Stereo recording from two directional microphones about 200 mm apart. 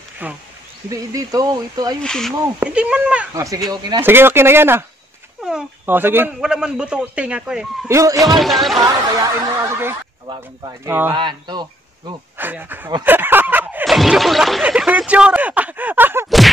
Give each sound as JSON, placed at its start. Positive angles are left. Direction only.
{"t": 0.2, "sound": "speech", "side_deg": -10}
{"t": 2.0, "sound": "a man's voice", "side_deg": 0}
{"t": 3.3, "sound": "speech", "side_deg": -15}
{"t": 4.0, "sound": "a man's voice", "side_deg": -10}
{"t": 7.9, "sound": "speech", "side_deg": -15}
{"t": 8.2, "sound": "a man's voice", "side_deg": 0}
{"t": 9.7, "sound": "speech", "side_deg": -10}
{"t": 10.2, "sound": "speech", "side_deg": -25}
{"t": 10.9, "sound": "speech", "side_deg": -10}
{"t": 11.1, "sound": "speech", "side_deg": -20}
{"t": 12.4, "sound": "speech", "side_deg": -10}
{"t": 13.0, "sound": "a sound", "side_deg": -10}